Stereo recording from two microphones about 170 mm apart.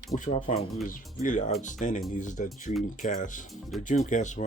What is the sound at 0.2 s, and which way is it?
Speech, 45° left (ahead or behind).